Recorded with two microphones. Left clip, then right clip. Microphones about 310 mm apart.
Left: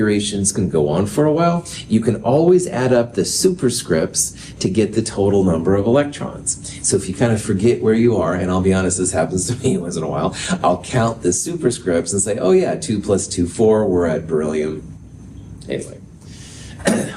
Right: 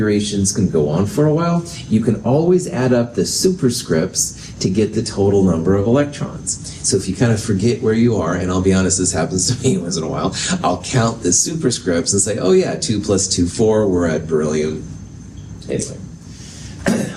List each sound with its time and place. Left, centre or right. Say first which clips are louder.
0.0 s speech: even; left
15.7 s speech: right 2 dB; left
16.9 s cough: left 1 dB; left